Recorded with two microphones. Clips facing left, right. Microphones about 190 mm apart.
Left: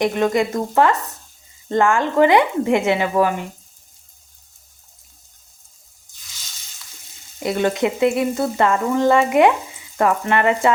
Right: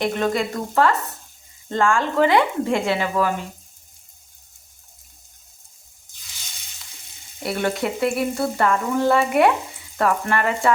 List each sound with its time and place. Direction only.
0.0 s speech: 20° left (ahead or behind)
7.4 s frying: 15° left (ahead or behind)
7.8 s speech: 20° left (ahead or behind)